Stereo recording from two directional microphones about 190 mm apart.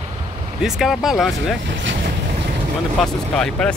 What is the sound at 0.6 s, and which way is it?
Speech, centre (ahead or behind).